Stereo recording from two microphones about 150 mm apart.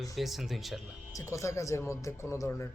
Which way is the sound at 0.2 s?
Centre (ahead or behind).